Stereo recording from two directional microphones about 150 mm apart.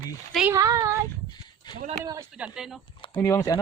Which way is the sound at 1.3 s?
30° left (ahead or behind).